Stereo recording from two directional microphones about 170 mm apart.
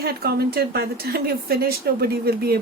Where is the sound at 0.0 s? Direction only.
65° right (ahead or behind).